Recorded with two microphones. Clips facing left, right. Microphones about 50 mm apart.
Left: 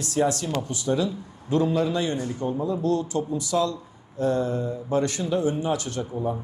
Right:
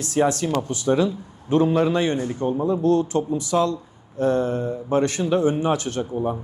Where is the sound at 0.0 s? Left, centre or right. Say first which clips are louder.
Right 3 dB; right.